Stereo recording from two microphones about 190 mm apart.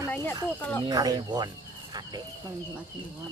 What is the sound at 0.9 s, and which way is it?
Speech, 20° right (ahead or behind).